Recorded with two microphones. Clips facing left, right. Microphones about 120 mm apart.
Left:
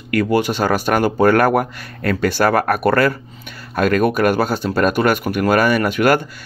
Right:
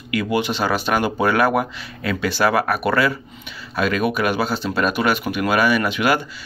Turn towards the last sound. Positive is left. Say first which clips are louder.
# left 4 dB
turn(degrees=45)  # may be behind; listen again after turning